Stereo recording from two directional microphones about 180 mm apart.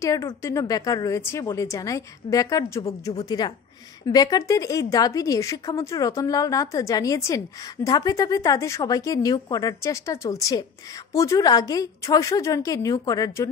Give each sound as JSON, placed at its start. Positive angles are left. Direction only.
{"t": 0.0, "sound": "a woman's voice", "side_deg": 20}